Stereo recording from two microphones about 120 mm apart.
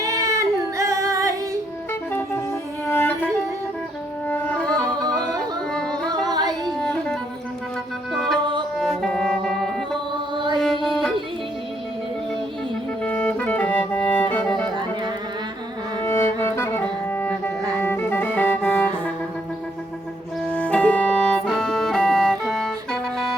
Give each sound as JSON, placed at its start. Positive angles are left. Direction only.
{"t": 0.0, "sound": "singing", "side_deg": -25}
{"t": 1.9, "sound": "music", "side_deg": 15}
{"t": 4.3, "sound": "music", "side_deg": 10}
{"t": 4.9, "sound": "yodeling", "side_deg": -30}
{"t": 5.4, "sound": "yodeling", "side_deg": 5}
{"t": 6.2, "sound": "music", "side_deg": -35}
{"t": 6.7, "sound": "music", "side_deg": 5}
{"t": 10.3, "sound": "mantra", "side_deg": -40}
{"t": 10.6, "sound": "music", "side_deg": 0}
{"t": 13.0, "sound": "music", "side_deg": 10}
{"t": 16.0, "sound": "music", "side_deg": 20}
{"t": 20.5, "sound": "music", "side_deg": 10}